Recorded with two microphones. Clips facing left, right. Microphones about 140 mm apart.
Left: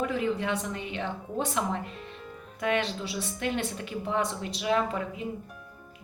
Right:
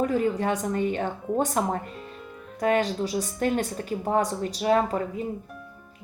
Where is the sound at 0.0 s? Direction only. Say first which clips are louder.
Right 5 dB; 40° right (ahead or behind).